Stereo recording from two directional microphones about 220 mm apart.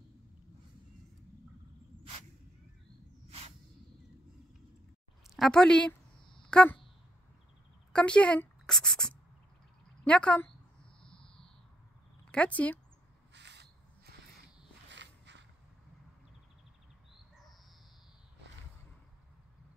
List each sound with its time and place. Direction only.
3.3 s a sound: 30° right (ahead or behind)
5.3 s speech: centre (ahead or behind)
7.9 s speech: 5° left (ahead or behind)
12.3 s speech: 5° left (ahead or behind)
13.3 s a sound: 50° right (ahead or behind)
14.9 s walk: 55° right (ahead or behind)